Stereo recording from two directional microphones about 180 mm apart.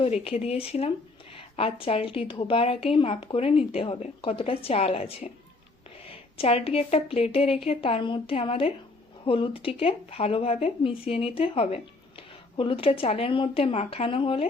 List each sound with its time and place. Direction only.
0.0 s a woman's voice: 35° left (ahead or behind)